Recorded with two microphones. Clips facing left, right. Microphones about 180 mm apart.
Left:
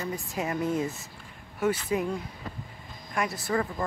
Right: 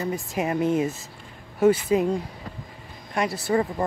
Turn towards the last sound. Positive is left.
turn(degrees=-25)  # may be behind; listen again after turning